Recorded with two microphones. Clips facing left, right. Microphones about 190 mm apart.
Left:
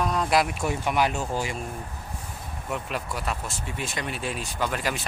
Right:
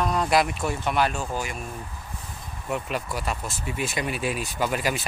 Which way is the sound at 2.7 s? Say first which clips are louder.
Right 3 dB; centre (ahead or behind).